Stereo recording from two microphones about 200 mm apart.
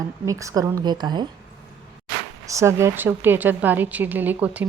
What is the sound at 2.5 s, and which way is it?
A woman's voice, 15° right (ahead or behind).